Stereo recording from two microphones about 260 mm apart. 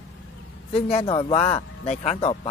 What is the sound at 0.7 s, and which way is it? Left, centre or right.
Speech, left.